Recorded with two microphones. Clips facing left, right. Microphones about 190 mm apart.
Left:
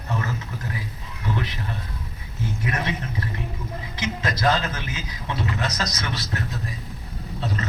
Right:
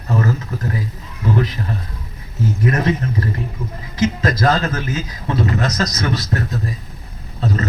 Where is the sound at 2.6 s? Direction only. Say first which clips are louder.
Right 10 dB; 45° right (ahead or behind).